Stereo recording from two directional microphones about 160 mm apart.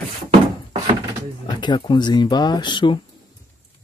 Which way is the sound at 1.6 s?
30° left (ahead or behind).